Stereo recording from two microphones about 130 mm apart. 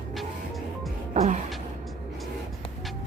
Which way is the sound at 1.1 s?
60° right (ahead or behind).